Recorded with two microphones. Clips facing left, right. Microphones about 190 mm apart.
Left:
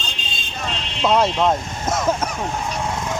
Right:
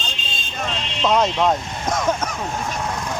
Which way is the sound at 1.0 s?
10° left (ahead or behind).